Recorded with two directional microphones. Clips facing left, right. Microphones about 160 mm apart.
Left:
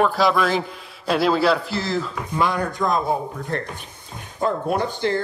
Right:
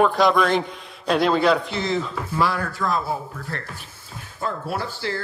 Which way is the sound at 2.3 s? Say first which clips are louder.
Left 2 dB; 15° left (ahead or behind).